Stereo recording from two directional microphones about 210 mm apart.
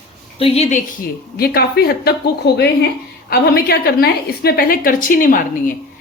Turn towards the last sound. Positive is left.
turn(degrees=40)  # may be behind; listen again after turning